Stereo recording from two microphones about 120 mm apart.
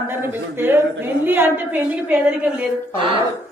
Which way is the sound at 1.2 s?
20° right (ahead or behind).